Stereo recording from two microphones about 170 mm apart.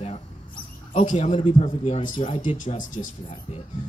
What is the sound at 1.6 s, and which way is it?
Speech, 35° left (ahead or behind).